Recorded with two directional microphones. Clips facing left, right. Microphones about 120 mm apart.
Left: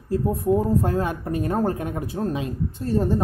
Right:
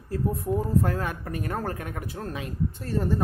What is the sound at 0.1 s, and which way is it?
Speech, 20° left (ahead or behind).